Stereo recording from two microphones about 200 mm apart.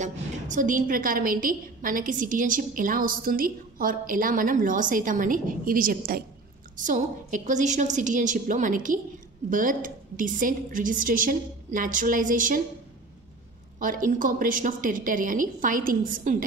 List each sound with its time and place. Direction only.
0.0 s a woman's voice: 40° right (ahead or behind)
13.7 s a woman's voice: 40° right (ahead or behind)